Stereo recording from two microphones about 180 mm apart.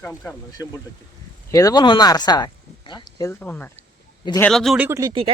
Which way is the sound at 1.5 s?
20° left (ahead or behind).